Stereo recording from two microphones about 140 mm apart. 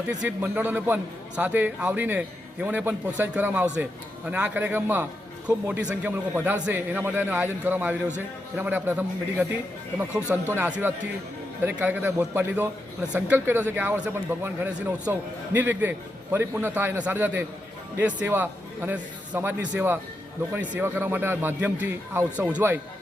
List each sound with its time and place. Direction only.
0.1 s a man's voice: 10° right (ahead or behind)